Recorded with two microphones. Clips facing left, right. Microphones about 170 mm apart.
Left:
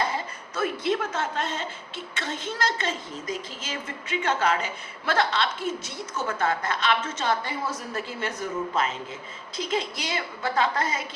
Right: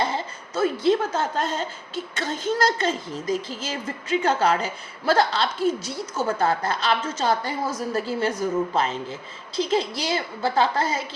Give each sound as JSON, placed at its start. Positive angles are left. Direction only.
{"t": 0.5, "sound": "a woman's voice", "side_deg": -30}